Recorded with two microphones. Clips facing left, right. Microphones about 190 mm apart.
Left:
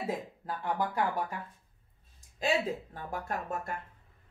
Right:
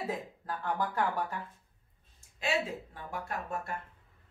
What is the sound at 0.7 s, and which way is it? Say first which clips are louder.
Speech: left 1 dB; 10° left (ahead or behind).